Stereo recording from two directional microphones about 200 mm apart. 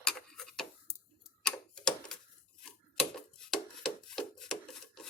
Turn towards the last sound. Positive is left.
turn(degrees=0)  # may be behind; listen again after turning